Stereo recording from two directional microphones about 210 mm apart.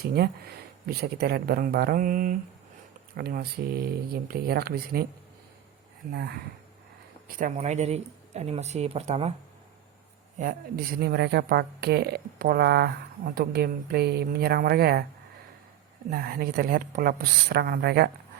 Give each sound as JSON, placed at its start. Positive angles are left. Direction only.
{"t": 0.0, "sound": "speech", "side_deg": -50}
{"t": 6.1, "sound": "speech", "side_deg": -50}
{"t": 7.3, "sound": "speech", "side_deg": -35}
{"t": 10.4, "sound": "speech", "side_deg": -35}
{"t": 11.0, "sound": "speech", "side_deg": -50}
{"t": 16.0, "sound": "speech", "side_deg": -45}